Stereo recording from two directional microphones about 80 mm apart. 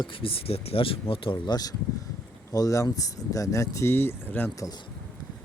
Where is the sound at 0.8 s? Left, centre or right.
Left.